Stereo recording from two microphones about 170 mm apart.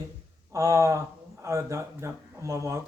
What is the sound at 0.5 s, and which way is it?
Speech, 20° right (ahead or behind).